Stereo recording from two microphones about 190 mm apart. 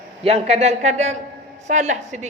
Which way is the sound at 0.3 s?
35° right (ahead or behind).